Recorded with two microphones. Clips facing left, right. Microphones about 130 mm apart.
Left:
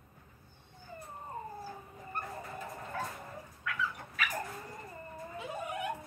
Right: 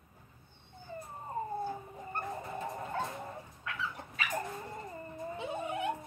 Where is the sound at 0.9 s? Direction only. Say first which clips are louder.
Right 4 dB; 30° right (ahead or behind).